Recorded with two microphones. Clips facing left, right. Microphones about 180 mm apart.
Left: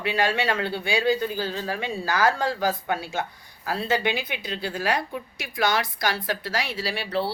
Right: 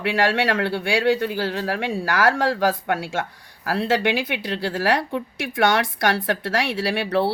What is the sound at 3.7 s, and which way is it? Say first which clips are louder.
A woman's voice: right 4 dB; 75° right (ahead or behind).